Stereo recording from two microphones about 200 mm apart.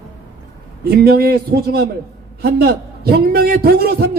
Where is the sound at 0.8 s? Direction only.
50° right (ahead or behind).